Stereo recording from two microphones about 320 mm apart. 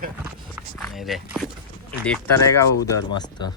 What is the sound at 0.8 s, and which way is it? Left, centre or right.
Speech, centre.